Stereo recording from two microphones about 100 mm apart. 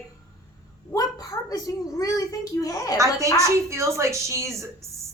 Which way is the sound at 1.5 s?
35° left (ahead or behind).